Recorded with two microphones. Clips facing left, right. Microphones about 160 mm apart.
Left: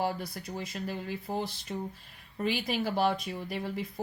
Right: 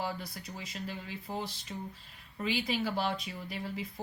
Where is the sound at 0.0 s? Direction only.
50° left (ahead or behind).